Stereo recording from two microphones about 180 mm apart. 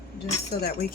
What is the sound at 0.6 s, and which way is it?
Speech, 55° left (ahead or behind).